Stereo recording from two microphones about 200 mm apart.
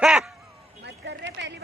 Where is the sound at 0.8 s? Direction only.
60° right (ahead or behind).